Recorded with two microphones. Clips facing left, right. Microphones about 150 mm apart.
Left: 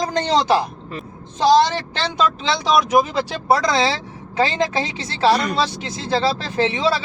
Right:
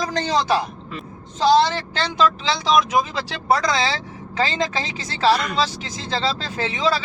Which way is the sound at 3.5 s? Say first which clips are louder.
Left 2 dB; 20° left (ahead or behind).